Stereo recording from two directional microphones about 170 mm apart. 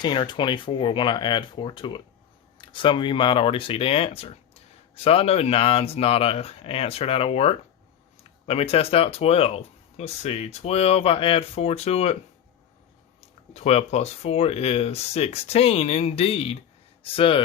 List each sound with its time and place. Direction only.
0.0 s speech: 25° left (ahead or behind)
13.5 s speech: 40° left (ahead or behind)